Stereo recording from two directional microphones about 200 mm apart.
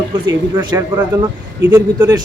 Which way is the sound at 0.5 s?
15° right (ahead or behind).